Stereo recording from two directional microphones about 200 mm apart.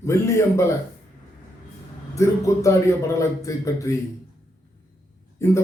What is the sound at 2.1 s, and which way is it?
Speech, 15° left (ahead or behind).